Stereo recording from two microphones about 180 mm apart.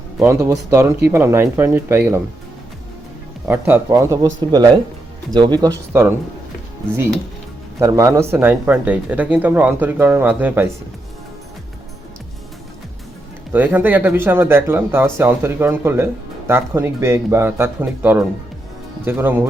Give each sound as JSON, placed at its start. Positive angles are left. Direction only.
{"t": 0.2, "sound": "speech", "side_deg": -15}
{"t": 3.4, "sound": "speech", "side_deg": -10}
{"t": 7.8, "sound": "speech", "side_deg": -20}
{"t": 13.5, "sound": "speech", "side_deg": -10}